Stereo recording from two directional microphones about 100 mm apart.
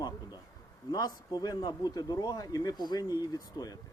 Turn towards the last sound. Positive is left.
turn(degrees=40)  # may be behind; listen again after turning